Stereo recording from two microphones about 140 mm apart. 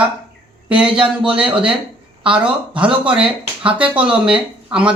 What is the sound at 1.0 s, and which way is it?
Speech, 40° right (ahead or behind).